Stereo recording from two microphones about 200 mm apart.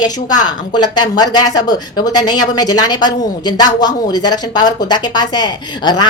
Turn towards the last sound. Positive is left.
turn(degrees=20)  # may be behind; listen again after turning